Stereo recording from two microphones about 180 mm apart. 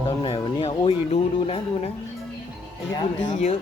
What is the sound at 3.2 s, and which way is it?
Speech, 40° left (ahead or behind).